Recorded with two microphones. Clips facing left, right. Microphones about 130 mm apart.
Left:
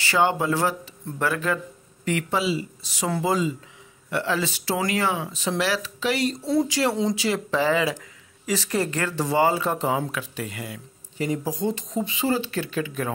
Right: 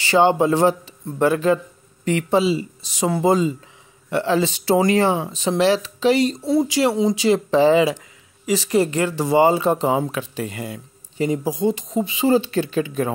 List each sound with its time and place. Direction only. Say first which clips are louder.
0.0 s speech: right 6 dB; 25° right (ahead or behind)
7.2 s speech: right 8 dB; 25° right (ahead or behind)
11.4 s speech: right 5 dB; 10° right (ahead or behind)